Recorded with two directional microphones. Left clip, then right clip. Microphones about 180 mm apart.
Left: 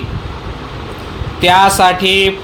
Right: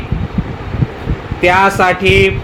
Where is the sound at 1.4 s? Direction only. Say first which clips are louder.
Left 1 dB; 30° left (ahead or behind).